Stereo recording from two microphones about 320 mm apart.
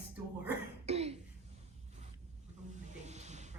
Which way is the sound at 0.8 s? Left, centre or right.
Centre.